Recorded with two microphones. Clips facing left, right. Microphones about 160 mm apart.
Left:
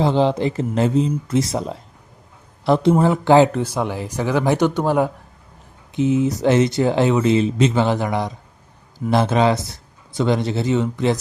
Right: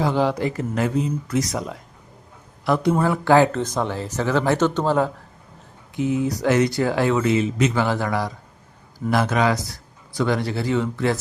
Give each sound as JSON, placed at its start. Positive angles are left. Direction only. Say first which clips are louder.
{"t": 0.0, "sound": "speech", "louder": "left 3 dB", "side_deg": 25}